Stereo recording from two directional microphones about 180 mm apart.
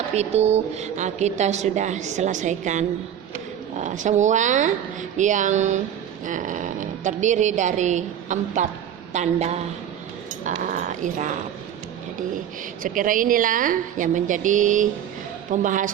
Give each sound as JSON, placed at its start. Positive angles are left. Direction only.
{"t": 0.1, "sound": "a woman's voice", "side_deg": -35}
{"t": 12.8, "sound": "speech", "side_deg": -50}